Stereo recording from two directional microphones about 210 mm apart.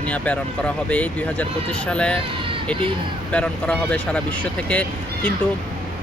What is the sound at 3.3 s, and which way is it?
Speech, 5° left (ahead or behind).